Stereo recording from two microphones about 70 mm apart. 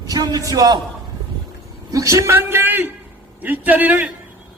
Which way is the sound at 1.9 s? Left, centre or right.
Right.